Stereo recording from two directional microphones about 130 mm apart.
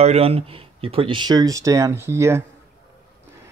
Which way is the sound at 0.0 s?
50° right (ahead or behind).